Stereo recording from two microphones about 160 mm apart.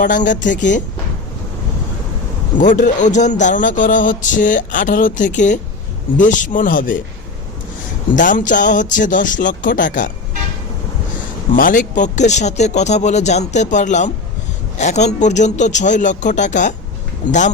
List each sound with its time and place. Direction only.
0.0 s speech: 55° left (ahead or behind)
2.6 s speech: 55° left (ahead or behind)
8.1 s speech: 55° left (ahead or behind)
11.5 s speech: 60° left (ahead or behind)